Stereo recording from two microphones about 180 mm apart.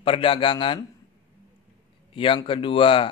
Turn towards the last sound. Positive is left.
turn(degrees=30)  # may be behind; listen again after turning